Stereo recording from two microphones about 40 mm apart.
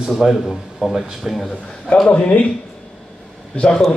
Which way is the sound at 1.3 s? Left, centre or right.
Centre.